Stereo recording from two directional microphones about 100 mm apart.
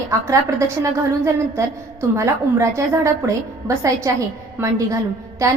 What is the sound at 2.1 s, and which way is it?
A woman's voice, 30° right (ahead or behind).